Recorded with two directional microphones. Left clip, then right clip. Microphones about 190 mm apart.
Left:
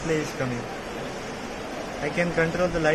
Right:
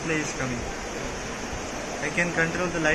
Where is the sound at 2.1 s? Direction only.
55° left (ahead or behind).